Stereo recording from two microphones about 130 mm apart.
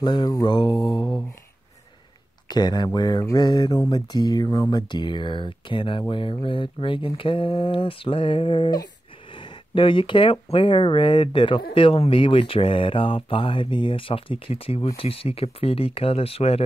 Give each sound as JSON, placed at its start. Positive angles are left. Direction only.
{"t": 0.0, "sound": "speech", "side_deg": 35}
{"t": 2.4, "sound": "speech", "side_deg": 35}